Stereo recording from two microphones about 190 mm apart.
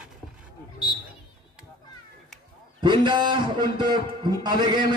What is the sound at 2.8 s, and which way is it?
A man's voice, 25° right (ahead or behind).